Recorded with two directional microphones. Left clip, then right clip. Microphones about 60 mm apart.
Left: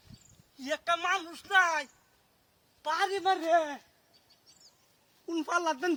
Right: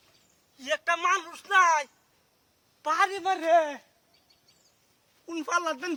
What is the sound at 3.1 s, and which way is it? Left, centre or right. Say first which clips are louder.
Speech: right 3 dB; right.